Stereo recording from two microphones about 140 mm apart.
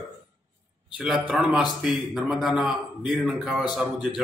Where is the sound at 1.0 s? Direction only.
5° right (ahead or behind).